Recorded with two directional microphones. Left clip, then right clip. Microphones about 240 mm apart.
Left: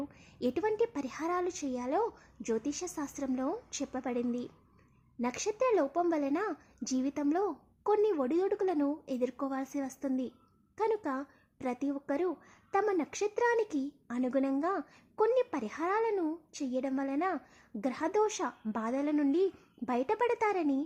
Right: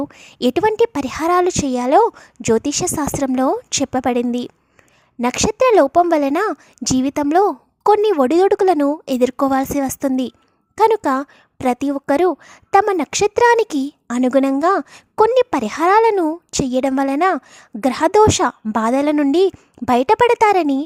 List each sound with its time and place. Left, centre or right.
0.1 s a woman's voice: right